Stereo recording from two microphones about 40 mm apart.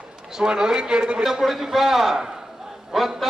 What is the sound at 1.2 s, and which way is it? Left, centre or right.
A man's voice, centre.